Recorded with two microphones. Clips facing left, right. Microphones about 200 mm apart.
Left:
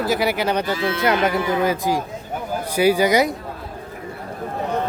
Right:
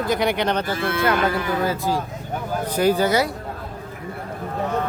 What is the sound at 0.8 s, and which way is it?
Speech, 55° right (ahead or behind).